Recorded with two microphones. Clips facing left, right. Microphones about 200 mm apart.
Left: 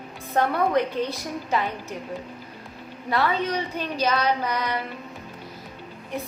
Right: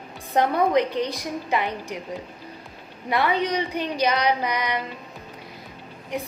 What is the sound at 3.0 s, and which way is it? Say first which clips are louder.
Speech: right 1 dB; 15° right (ahead or behind).